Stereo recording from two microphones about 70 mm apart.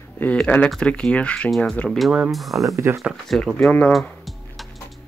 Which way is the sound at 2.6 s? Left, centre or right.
Right.